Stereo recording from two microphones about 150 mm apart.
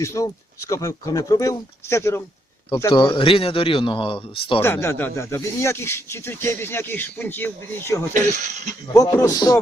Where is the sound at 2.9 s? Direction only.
35° left (ahead or behind).